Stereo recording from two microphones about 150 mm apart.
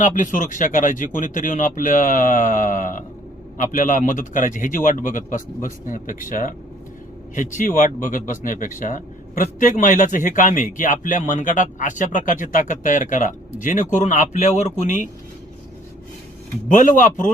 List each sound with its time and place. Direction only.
0.0 s a man's voice: 60° left (ahead or behind)
16.6 s a man's voice: 60° left (ahead or behind)